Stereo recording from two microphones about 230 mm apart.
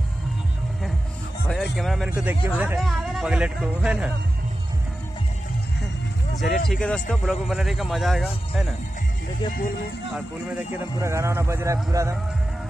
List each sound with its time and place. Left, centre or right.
1.5 s speech: centre
6.4 s speech: left
6.7 s speech: centre
10.1 s a man's voice: centre